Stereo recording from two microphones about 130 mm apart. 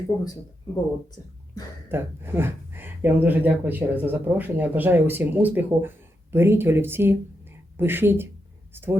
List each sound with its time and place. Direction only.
1.9 s speech: 15° right (ahead or behind)